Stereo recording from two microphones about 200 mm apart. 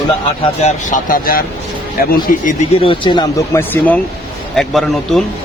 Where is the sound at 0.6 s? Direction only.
35° left (ahead or behind).